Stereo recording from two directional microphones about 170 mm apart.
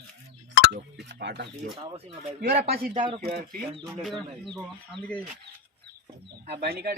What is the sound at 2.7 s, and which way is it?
Speech, 60° right (ahead or behind).